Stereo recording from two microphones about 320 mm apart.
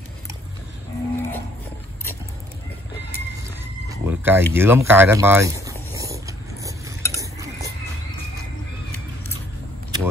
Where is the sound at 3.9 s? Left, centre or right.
Centre.